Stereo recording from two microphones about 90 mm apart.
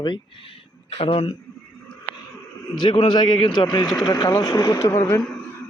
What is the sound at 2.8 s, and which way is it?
Speech, 60° left (ahead or behind).